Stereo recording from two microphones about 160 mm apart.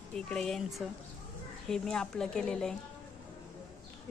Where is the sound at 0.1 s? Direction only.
5° left (ahead or behind).